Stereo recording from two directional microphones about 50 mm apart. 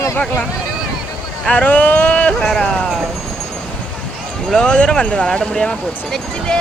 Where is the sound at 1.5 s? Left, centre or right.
Left.